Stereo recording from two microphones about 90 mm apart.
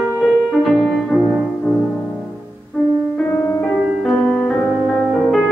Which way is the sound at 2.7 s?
15° left (ahead or behind).